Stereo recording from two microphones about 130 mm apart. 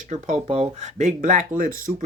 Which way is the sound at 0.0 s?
65° right (ahead or behind).